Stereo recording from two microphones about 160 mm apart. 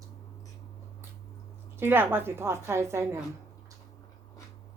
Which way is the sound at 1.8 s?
15° right (ahead or behind).